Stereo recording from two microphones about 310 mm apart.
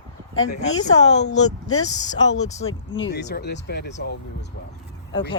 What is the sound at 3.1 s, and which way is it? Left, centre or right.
Speech, left.